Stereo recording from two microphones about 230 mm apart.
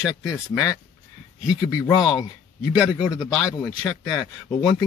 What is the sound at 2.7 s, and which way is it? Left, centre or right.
Speech, centre.